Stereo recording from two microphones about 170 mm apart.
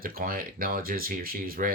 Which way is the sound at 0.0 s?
60° right (ahead or behind).